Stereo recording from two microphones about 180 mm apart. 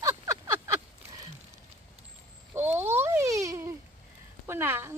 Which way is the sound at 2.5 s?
10° right (ahead or behind).